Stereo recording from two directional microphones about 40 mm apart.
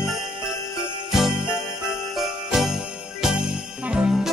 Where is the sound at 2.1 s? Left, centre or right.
Centre.